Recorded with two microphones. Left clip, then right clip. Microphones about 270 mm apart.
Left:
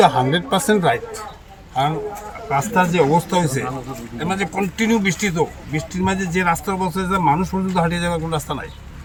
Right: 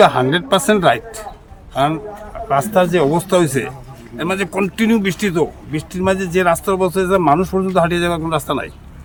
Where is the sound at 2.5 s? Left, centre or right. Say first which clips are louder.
Right 4 dB; centre.